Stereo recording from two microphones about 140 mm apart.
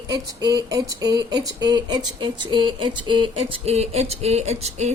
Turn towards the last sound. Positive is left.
turn(degrees=-50)  # may be behind; listen again after turning